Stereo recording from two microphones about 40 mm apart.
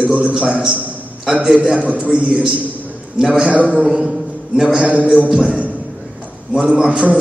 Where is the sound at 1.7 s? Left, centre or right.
Right.